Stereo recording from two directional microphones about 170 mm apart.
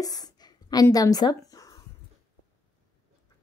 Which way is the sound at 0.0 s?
20° left (ahead or behind).